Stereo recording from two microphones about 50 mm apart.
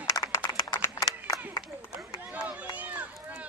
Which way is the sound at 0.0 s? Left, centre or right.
Left.